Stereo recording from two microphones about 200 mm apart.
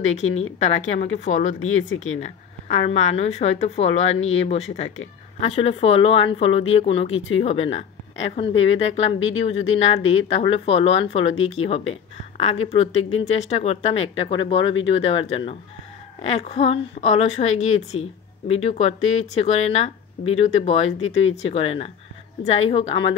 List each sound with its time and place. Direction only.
0.0 s speech: 35° left (ahead or behind)